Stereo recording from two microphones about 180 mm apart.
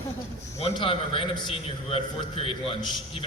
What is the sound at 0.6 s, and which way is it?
A man's voice, 30° left (ahead or behind).